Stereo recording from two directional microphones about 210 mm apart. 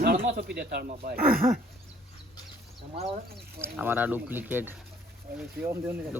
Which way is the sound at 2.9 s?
30° right (ahead or behind).